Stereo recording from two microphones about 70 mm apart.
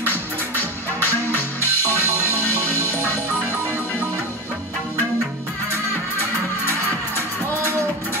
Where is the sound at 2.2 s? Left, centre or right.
Left.